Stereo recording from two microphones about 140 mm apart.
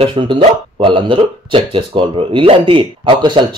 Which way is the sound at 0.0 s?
40° right (ahead or behind).